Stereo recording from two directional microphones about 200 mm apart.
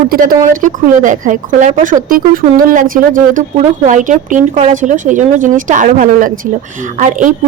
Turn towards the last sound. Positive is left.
turn(degrees=-40)  # may be behind; listen again after turning